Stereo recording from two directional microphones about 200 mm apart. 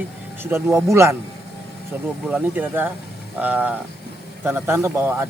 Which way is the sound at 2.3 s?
10° right (ahead or behind).